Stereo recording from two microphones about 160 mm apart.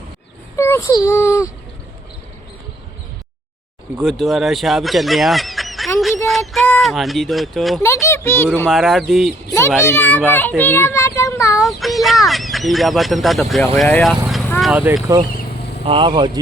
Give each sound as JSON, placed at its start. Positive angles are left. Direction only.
{"t": 0.5, "sound": "a child's voice", "side_deg": 15}
{"t": 3.9, "sound": "speech", "side_deg": 0}
{"t": 6.0, "sound": "a sound", "side_deg": 0}
{"t": 6.7, "sound": "speech", "side_deg": 0}
{"t": 7.8, "sound": "a child's voice", "side_deg": 15}
{"t": 8.7, "sound": "speech", "side_deg": 0}
{"t": 9.8, "sound": "a child's voice", "side_deg": 15}
{"t": 10.6, "sound": "child singing", "side_deg": 15}
{"t": 11.6, "sound": "a child's voice", "side_deg": 0}
{"t": 14.6, "sound": "speech", "side_deg": -5}
{"t": 15.8, "sound": "speech", "side_deg": -35}